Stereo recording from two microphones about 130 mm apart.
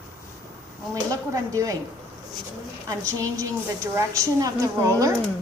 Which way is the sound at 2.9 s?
25° right (ahead or behind).